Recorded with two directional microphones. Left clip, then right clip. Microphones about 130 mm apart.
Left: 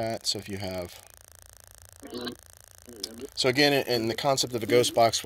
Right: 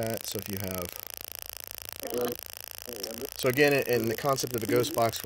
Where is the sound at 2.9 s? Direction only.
20° right (ahead or behind).